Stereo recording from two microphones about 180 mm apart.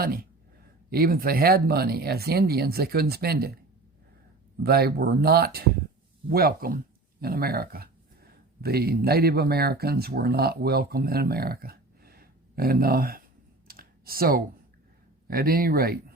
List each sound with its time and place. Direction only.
0.0 s speech: 55° right (ahead or behind)
4.6 s speech: 60° right (ahead or behind)
13.7 s computer keyboard: 55° right (ahead or behind)
15.3 s speech: 55° right (ahead or behind)